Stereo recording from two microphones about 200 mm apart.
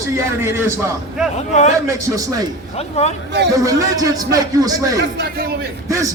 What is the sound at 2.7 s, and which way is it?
Speech, 35° left (ahead or behind).